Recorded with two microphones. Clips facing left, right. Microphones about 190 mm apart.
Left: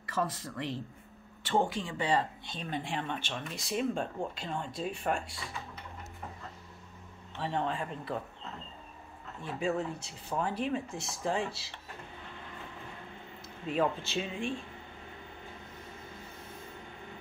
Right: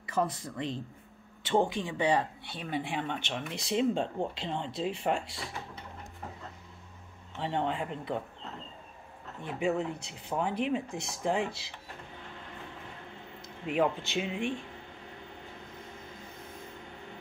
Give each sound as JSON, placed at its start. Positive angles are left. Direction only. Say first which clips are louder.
{"t": 0.1, "sound": "speech", "louder": "right 3 dB", "side_deg": -15}
{"t": 7.3, "sound": "speech", "louder": "right 2 dB", "side_deg": -20}
{"t": 9.4, "sound": "speech", "louder": "right 2 dB", "side_deg": -20}
{"t": 13.7, "sound": "speech", "louder": "right 2 dB", "side_deg": -15}